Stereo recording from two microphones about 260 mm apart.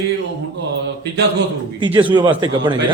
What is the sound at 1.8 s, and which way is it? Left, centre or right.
Speech, centre.